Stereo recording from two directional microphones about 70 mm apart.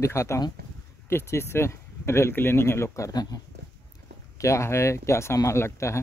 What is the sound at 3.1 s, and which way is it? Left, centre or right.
Speech, left.